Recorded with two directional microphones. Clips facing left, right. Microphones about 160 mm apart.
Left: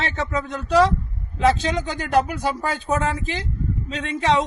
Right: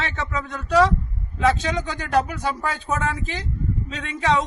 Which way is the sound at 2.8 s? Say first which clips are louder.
Left 4 dB; 30° left (ahead or behind).